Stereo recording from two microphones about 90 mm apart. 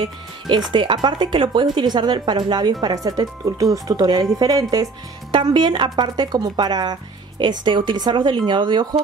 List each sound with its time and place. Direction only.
0.7 s a woman's voice: 60° right (ahead or behind); by 4.8 s 45° right (ahead or behind)
5.3 s a woman's voice: 60° right (ahead or behind)